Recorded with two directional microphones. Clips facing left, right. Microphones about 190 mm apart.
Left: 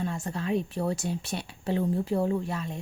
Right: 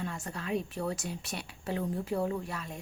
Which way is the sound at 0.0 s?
30° left (ahead or behind).